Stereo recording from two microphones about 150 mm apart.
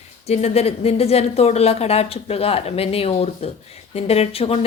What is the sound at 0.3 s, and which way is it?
A woman's voice, 45° left (ahead or behind).